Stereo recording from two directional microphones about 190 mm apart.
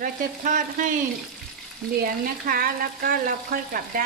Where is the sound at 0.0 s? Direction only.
45° right (ahead or behind).